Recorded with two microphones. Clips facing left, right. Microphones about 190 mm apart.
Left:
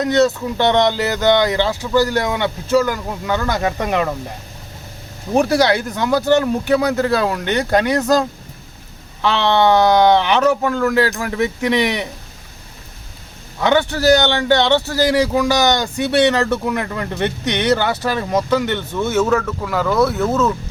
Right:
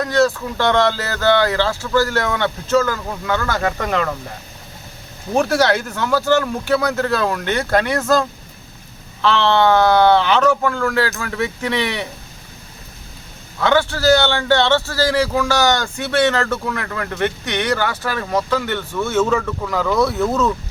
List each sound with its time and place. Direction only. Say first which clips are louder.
0.0 s a man's voice: left 2 dB; 20° left (ahead or behind)
5.3 s a man's voice: left 2 dB; 15° left (ahead or behind)
13.6 s a man's voice: left 1 dB; 15° left (ahead or behind)
19.3 s speech: left 1 dB; centre (ahead or behind)